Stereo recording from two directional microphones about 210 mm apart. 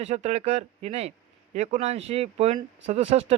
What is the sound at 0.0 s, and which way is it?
Speech, 30° right (ahead or behind).